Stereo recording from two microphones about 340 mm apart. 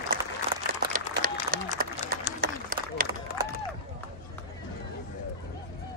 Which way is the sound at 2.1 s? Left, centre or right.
Right.